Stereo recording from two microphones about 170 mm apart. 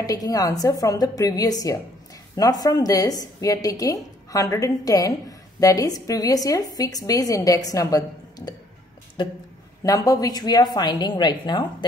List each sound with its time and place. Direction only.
0.0 s a woman's voice: 20° left (ahead or behind)
9.8 s a woman's voice: 20° left (ahead or behind)